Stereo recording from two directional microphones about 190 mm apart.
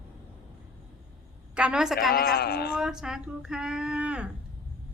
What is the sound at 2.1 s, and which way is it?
Speech, 50° left (ahead or behind).